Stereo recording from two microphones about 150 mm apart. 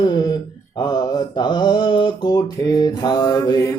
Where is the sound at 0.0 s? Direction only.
30° left (ahead or behind).